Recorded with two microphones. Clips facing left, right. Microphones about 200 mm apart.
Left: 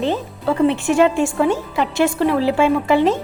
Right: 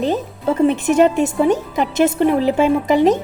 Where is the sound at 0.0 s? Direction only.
20° right (ahead or behind).